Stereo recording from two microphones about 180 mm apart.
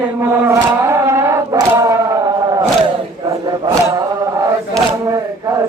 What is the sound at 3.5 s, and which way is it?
Chant, 20° right (ahead or behind).